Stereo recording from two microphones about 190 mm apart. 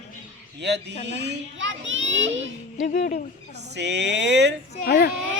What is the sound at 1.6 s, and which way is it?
Children playing, 85° right.